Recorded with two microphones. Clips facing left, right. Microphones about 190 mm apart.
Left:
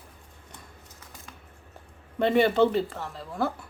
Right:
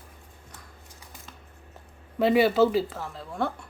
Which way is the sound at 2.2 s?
5° right (ahead or behind).